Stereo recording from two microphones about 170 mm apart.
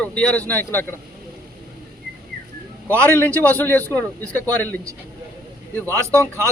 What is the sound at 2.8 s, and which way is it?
A man's voice, 15° left (ahead or behind).